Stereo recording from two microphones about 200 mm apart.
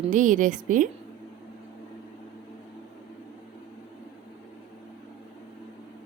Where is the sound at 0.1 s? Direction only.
40° right (ahead or behind).